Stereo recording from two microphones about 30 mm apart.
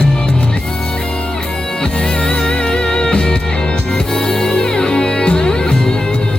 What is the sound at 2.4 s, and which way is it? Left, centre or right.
Music, left.